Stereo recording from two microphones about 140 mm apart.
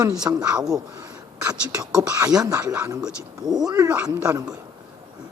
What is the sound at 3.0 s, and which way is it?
Speech, 5° right (ahead or behind).